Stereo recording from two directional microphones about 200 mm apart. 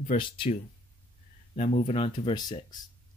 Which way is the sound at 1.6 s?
35° left (ahead or behind).